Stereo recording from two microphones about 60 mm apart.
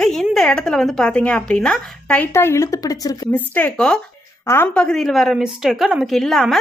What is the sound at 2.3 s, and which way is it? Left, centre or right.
Speech, left.